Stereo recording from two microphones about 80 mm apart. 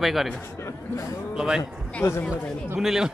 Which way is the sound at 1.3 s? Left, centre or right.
Centre.